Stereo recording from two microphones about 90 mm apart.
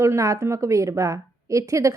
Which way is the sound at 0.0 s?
35° right (ahead or behind).